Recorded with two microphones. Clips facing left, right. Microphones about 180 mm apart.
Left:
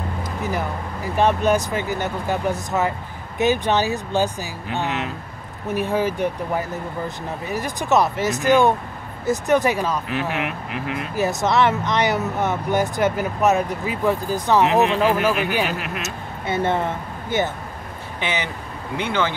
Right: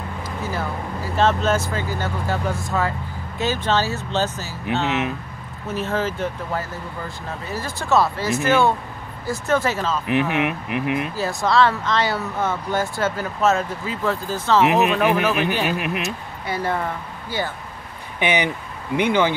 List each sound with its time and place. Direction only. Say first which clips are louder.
0.4 s speech: left 1 dB; 15° left (ahead or behind)
4.8 s speech: right 3 dB; 20° right (ahead or behind)
5.7 s speech: left 3 dB; 15° left (ahead or behind)
10.0 s speech: right 4 dB; 20° right (ahead or behind)
11.1 s speech: left 2 dB; 20° left (ahead or behind)
15.7 s speech: right 4 dB; 20° right (ahead or behind)
16.0 s speech: right 1 dB; 25° left (ahead or behind)
18.2 s speech: right 5 dB; 15° right (ahead or behind)